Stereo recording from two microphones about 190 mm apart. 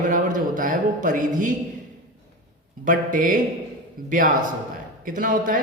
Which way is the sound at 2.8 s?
45° right (ahead or behind).